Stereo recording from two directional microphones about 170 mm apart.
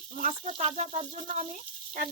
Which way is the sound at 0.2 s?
40° right (ahead or behind).